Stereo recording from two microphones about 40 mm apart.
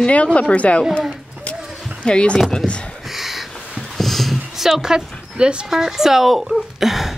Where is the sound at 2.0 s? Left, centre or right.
Left.